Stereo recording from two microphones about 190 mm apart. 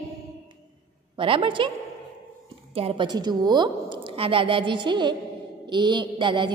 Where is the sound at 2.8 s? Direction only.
30° right (ahead or behind).